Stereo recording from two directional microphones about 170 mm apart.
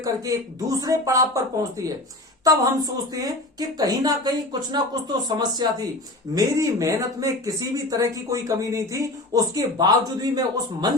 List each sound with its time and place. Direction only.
0.8 s speech: 20° right (ahead or behind)